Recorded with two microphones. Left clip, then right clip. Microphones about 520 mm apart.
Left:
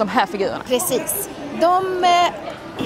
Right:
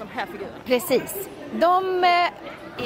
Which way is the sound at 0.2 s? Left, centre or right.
Left.